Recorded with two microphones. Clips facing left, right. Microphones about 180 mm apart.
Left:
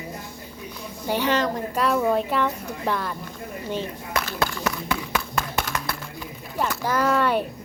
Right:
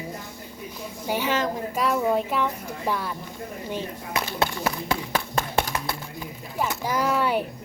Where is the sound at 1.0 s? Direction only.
5° right (ahead or behind).